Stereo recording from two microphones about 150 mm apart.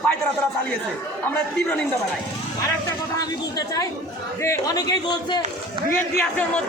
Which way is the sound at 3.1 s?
25° left (ahead or behind).